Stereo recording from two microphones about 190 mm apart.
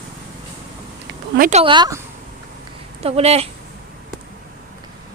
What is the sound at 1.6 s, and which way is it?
Speech, 25° right (ahead or behind).